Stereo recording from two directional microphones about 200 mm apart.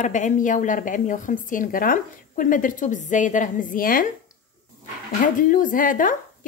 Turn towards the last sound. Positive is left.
turn(degrees=40)  # may be behind; listen again after turning